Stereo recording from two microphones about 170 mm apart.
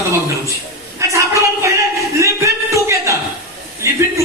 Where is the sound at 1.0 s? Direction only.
15° right (ahead or behind).